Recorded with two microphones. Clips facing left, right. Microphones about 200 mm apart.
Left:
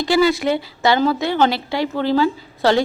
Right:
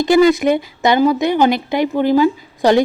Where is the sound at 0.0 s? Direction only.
20° right (ahead or behind).